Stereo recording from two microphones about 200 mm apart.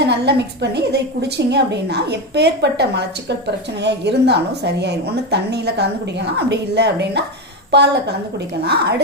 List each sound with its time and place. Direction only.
0.0 s a woman's voice: 55° right (ahead or behind)